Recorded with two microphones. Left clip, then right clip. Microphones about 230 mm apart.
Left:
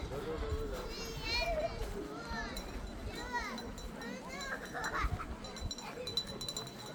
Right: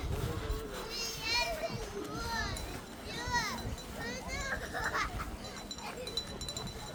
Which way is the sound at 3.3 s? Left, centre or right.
Right.